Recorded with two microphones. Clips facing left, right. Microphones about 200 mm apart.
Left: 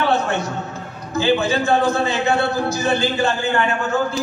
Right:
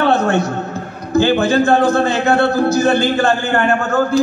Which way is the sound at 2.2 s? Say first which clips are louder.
Right 6 dB; 60° right (ahead or behind).